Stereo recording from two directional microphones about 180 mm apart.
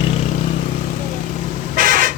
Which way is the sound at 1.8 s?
50° right (ahead or behind).